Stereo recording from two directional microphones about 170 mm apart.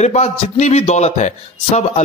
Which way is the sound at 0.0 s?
40° left (ahead or behind).